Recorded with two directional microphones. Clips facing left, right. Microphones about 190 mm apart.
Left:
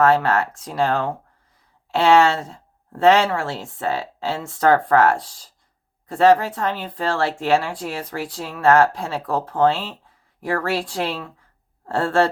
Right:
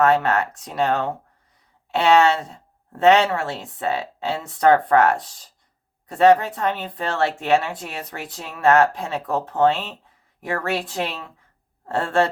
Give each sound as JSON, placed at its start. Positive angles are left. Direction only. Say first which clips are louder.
{"t": 0.0, "sound": "speech", "louder": "left 1 dB", "side_deg": -20}